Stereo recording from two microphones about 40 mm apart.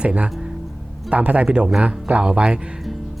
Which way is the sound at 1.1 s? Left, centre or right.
Right.